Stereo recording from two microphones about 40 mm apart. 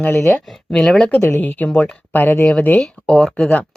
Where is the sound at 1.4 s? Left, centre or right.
Left.